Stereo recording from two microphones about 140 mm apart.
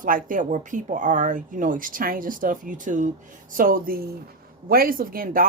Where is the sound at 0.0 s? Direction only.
75° right (ahead or behind).